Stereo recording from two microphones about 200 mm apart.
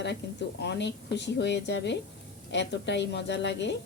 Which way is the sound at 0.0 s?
60° left (ahead or behind).